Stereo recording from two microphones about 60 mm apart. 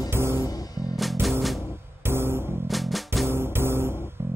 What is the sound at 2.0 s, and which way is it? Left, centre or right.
Music, right.